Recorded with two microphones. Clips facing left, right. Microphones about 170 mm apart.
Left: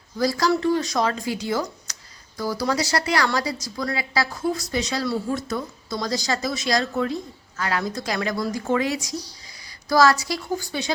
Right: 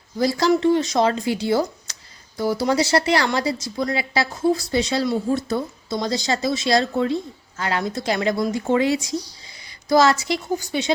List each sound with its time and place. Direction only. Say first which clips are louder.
0.2 s speech: right 3 dB; 25° right (ahead or behind)